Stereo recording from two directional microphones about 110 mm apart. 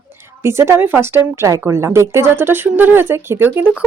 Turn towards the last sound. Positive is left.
turn(degrees=-20)  # may be behind; listen again after turning